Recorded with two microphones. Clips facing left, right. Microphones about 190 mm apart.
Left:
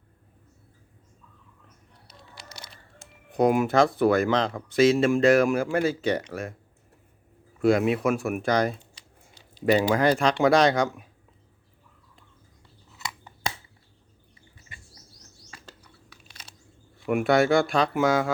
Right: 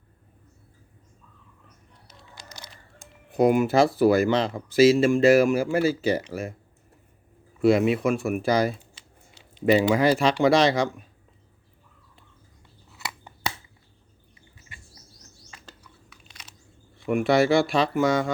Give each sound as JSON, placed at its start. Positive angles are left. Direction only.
{"t": 3.3, "sound": "speech", "side_deg": -5}
{"t": 7.6, "sound": "speech", "side_deg": 0}
{"t": 16.0, "sound": "crunch", "side_deg": 30}
{"t": 17.1, "sound": "speech", "side_deg": 0}